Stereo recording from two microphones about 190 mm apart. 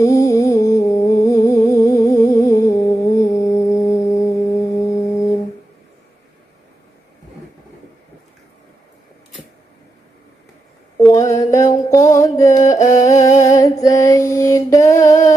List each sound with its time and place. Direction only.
0.0 s a sound: 15° left (ahead or behind)
2.1 s music: 15° left (ahead or behind)
11.2 s mantra: 15° left (ahead or behind)
12.1 s music: 15° left (ahead or behind)
13.4 s mantra: 20° left (ahead or behind)